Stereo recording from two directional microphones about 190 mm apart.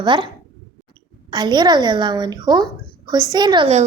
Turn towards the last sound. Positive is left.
turn(degrees=-25)  # may be behind; listen again after turning